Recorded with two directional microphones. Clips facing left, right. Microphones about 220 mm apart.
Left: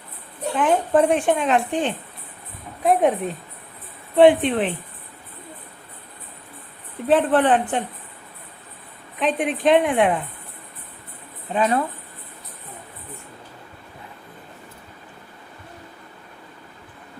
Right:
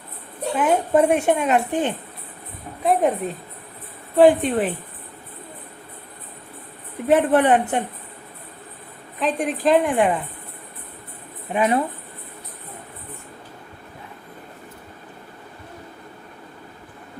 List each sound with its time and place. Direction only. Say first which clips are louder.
0.5 s a woman's voice: even; 10° right (ahead or behind)
7.1 s a woman's voice: right 1 dB; 10° right (ahead or behind)
9.1 s a woman's voice: left 1 dB; centre (ahead or behind)
11.5 s a woman's voice: right 1 dB; 15° right (ahead or behind)